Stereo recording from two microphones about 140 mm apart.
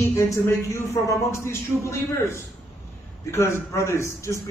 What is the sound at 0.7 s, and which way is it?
A man's voice, 20° left (ahead or behind).